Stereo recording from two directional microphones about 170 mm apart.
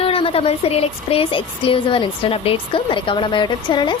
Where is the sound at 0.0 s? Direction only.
35° left (ahead or behind).